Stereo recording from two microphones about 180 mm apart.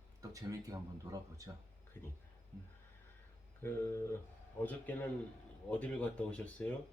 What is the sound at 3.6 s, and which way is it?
Speech, 10° left (ahead or behind).